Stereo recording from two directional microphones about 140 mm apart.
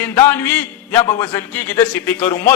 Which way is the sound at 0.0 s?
15° left (ahead or behind).